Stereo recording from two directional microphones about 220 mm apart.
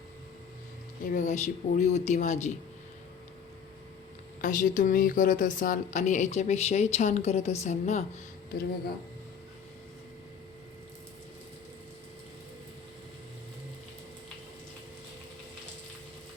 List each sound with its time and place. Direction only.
1.1 s a woman's voice: 35° left (ahead or behind)
4.4 s a woman's voice: 35° left (ahead or behind)